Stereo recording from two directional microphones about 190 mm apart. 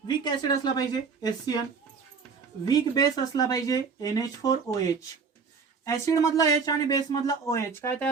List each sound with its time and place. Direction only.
0.1 s speech: 20° left (ahead or behind)
2.6 s speech: 20° left (ahead or behind)